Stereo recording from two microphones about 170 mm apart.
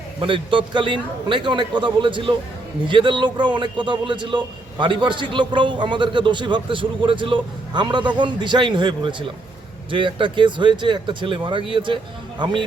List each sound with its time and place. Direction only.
0.2 s a man's voice: 30° right (ahead or behind)